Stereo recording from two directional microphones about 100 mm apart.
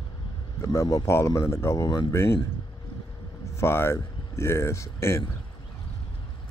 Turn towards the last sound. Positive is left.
turn(degrees=25)  # may be behind; listen again after turning